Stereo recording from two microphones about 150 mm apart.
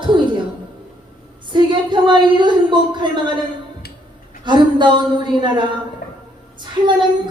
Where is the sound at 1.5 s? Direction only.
30° right (ahead or behind).